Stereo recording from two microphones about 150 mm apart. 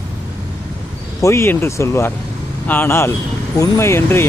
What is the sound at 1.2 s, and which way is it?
Speech, 20° left (ahead or behind).